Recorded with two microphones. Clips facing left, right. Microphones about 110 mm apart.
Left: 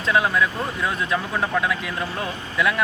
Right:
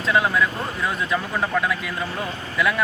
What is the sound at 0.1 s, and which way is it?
Speech, centre (ahead or behind).